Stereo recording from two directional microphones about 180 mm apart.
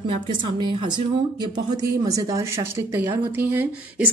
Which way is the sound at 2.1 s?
20° right (ahead or behind).